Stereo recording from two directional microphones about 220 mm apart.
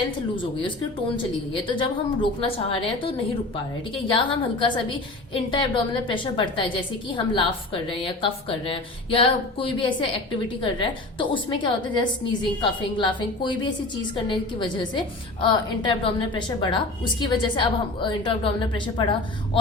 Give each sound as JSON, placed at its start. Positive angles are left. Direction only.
{"t": 1.1, "sound": "a woman's voice", "side_deg": 20}